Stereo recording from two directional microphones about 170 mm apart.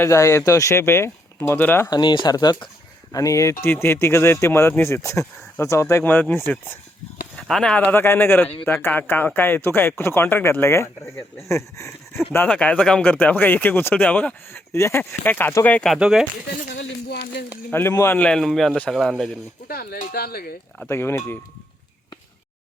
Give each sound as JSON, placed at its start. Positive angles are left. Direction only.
{"t": 0.0, "sound": "speech", "side_deg": 15}
{"t": 1.9, "sound": "speech", "side_deg": 25}
{"t": 16.6, "sound": "a sound", "side_deg": 70}
{"t": 17.7, "sound": "a man's voice", "side_deg": 15}
{"t": 19.6, "sound": "speech", "side_deg": 65}
{"t": 20.8, "sound": "speech", "side_deg": 15}